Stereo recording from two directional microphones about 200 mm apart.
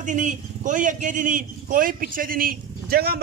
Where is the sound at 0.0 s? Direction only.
40° right (ahead or behind).